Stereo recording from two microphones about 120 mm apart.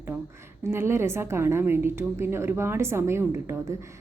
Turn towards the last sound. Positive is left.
turn(degrees=-20)  # may be behind; listen again after turning